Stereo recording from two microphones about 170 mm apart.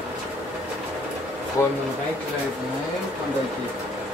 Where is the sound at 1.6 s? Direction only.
15° left (ahead or behind).